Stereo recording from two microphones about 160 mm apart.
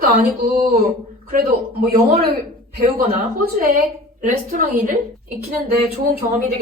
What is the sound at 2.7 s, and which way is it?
Speech, 65° right (ahead or behind).